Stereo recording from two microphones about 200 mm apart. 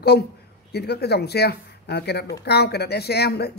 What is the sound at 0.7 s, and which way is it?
Speech, 55° left (ahead or behind).